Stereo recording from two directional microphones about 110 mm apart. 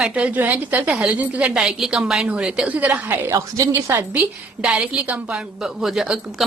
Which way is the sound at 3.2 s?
30° right (ahead or behind).